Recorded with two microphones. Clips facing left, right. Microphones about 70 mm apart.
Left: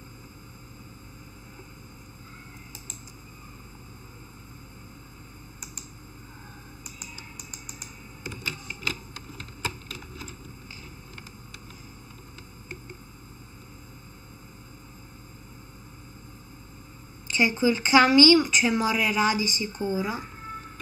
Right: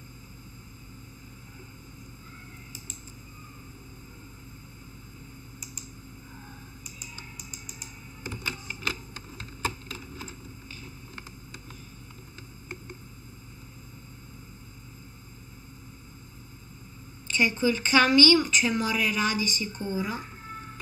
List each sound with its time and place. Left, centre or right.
7.3 s vehicle: left
8.5 s computer keyboard: right
17.6 s a woman's voice: centre